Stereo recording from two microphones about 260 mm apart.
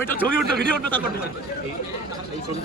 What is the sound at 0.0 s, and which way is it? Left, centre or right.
Speech, centre.